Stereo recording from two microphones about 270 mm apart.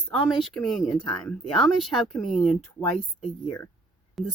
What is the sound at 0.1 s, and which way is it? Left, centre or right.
Speech, centre.